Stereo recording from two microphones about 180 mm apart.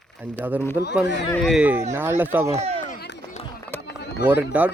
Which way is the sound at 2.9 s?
60° left (ahead or behind).